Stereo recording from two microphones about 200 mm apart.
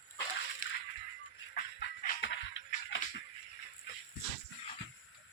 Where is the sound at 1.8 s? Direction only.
55° left (ahead or behind).